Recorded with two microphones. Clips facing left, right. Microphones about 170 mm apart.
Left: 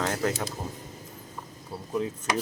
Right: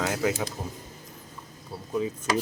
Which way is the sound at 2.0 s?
Centre (ahead or behind).